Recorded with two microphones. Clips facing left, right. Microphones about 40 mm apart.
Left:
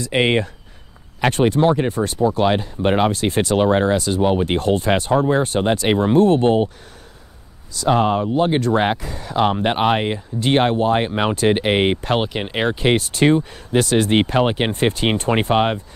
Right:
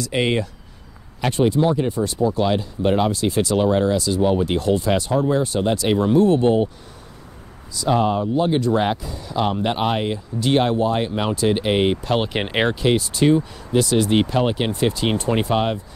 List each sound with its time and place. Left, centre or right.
0.0 s speech: left
1.2 s speech: left
7.7 s speech: left
8.7 s speech: left
9.0 s speech: left
12.3 s speech: centre
12.9 s speech: left